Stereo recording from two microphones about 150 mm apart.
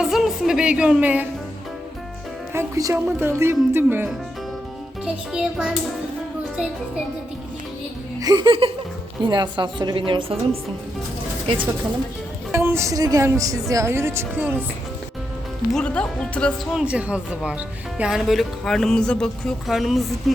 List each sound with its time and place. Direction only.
0.0 s speech: centre (ahead or behind)
2.5 s speech: 20° right (ahead or behind)
8.2 s a woman's voice: 25° right (ahead or behind)
12.5 s speech: 15° right (ahead or behind)
15.7 s speech: 5° left (ahead or behind)
16.7 s speech: 5° right (ahead or behind)